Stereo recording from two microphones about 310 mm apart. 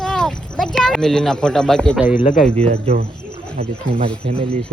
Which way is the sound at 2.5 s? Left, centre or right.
Centre.